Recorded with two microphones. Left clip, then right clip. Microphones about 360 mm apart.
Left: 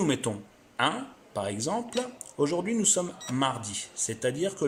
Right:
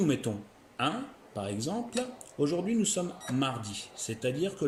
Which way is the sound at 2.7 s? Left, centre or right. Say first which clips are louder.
Left 3 dB; centre.